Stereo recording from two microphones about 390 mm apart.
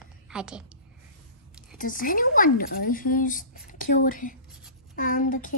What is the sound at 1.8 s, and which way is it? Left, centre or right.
Speech, left.